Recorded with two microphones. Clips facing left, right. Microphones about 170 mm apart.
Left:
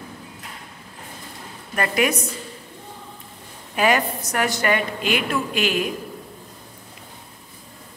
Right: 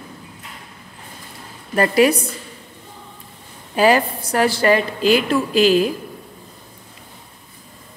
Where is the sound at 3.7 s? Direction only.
30° right (ahead or behind).